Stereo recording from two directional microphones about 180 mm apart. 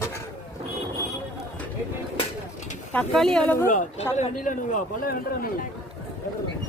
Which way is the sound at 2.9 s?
5° left (ahead or behind).